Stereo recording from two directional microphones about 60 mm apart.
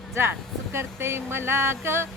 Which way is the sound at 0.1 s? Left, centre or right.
Right.